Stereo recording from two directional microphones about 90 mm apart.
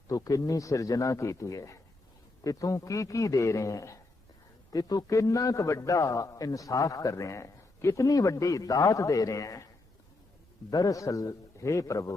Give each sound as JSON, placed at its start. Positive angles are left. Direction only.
{"t": 0.1, "sound": "a man's voice", "side_deg": 40}
{"t": 10.7, "sound": "a man's voice", "side_deg": 40}